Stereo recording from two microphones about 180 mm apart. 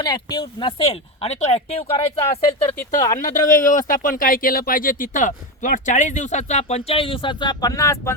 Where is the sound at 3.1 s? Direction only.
45° left (ahead or behind).